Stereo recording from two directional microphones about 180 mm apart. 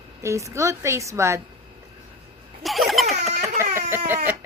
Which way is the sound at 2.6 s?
Centre (ahead or behind).